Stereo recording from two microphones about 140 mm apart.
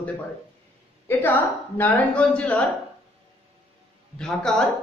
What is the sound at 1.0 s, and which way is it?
A man's voice, 15° left (ahead or behind).